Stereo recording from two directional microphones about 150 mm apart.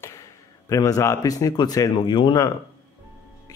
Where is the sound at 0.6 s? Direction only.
20° left (ahead or behind).